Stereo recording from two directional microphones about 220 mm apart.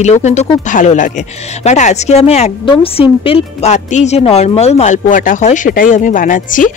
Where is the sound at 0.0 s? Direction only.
30° left (ahead or behind).